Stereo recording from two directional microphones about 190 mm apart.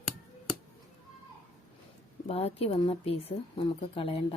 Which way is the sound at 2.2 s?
30° left (ahead or behind).